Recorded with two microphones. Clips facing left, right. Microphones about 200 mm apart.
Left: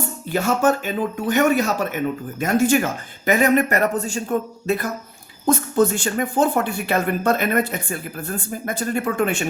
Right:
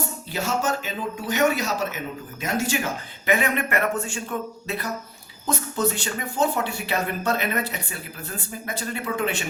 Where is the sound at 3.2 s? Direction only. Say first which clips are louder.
Left 6 dB; 40° left (ahead or behind).